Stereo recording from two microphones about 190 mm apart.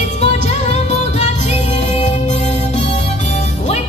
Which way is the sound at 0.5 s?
35° left (ahead or behind).